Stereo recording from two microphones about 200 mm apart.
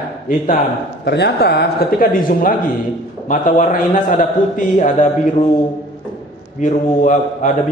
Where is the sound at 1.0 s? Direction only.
55° left (ahead or behind); by 5.1 s 40° left (ahead or behind).